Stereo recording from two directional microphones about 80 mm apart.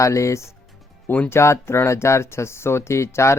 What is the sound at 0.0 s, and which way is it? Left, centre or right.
Speech, left.